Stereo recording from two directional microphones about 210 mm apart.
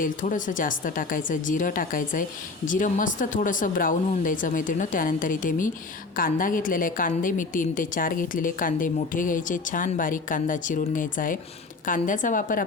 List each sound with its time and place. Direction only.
0.0 s a woman's voice: 40° left (ahead or behind)